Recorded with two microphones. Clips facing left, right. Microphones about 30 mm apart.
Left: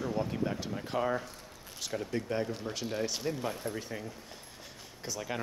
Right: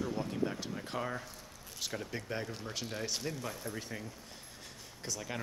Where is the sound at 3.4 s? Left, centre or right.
Left.